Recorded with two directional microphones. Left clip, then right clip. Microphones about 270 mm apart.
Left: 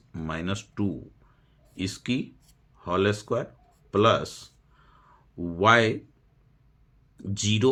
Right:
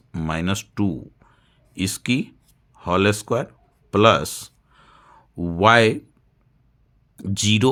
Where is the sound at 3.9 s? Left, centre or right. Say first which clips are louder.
Right 6 dB; right.